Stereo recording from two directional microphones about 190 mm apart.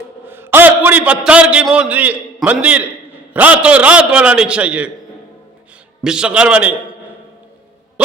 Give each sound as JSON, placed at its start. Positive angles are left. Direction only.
{"t": 0.3, "sound": "a man's voice", "side_deg": -10}
{"t": 6.0, "sound": "a man's voice", "side_deg": -5}